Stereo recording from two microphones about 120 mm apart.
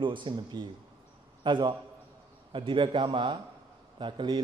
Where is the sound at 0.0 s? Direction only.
40° right (ahead or behind).